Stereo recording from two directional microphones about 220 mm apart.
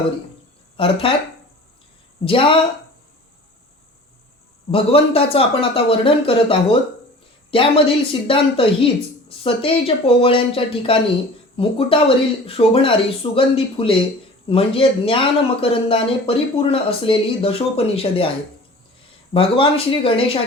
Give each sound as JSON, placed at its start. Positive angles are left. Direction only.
{"t": 0.8, "sound": "speech", "side_deg": 25}
{"t": 2.2, "sound": "speech", "side_deg": 25}
{"t": 4.7, "sound": "speech", "side_deg": 25}
{"t": 19.3, "sound": "speech", "side_deg": 25}